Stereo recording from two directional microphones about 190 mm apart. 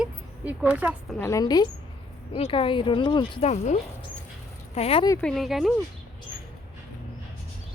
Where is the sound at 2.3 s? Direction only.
30° left (ahead or behind).